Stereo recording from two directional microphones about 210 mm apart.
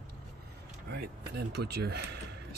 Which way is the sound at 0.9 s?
50° right (ahead or behind).